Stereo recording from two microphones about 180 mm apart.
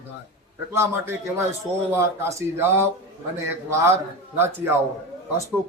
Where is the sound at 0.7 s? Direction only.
15° right (ahead or behind).